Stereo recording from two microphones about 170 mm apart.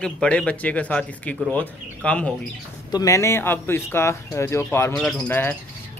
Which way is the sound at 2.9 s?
20° left (ahead or behind).